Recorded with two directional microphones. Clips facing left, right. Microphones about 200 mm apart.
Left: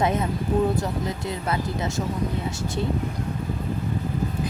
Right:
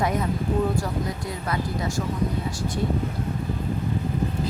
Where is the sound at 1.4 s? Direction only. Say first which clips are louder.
Even; 25° left (ahead or behind).